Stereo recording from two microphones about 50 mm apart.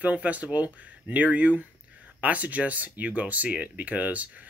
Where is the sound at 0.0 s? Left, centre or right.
Right.